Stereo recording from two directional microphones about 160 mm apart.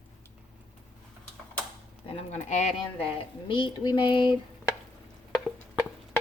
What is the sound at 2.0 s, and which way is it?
Speech, 45° left (ahead or behind).